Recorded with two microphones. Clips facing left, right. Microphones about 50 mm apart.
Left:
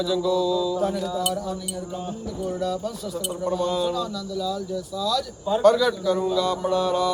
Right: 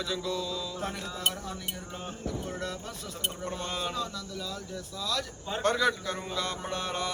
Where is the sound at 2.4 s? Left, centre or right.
Right.